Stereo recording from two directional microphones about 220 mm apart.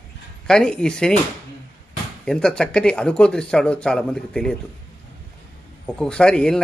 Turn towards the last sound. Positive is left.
turn(degrees=5)  # may be behind; listen again after turning